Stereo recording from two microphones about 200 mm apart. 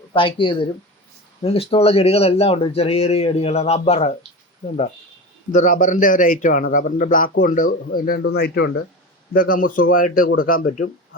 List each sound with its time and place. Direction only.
0.1 s speech: 25° left (ahead or behind)
5.5 s a man's voice: 40° left (ahead or behind); by 8.8 s 60° left (ahead or behind)
9.3 s speech: 45° left (ahead or behind)